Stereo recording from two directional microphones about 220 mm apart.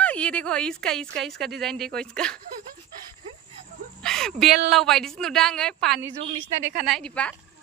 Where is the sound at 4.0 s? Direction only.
Centre (ahead or behind).